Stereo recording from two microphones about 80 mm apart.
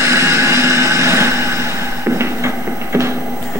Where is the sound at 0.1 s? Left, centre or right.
Right.